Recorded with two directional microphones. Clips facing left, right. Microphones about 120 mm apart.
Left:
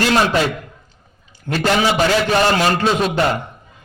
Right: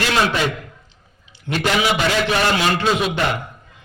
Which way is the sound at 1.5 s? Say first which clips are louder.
Left 2 dB; 40° left (ahead or behind).